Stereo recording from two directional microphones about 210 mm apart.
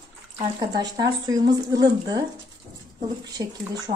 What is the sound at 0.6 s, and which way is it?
Speech, 20° right (ahead or behind).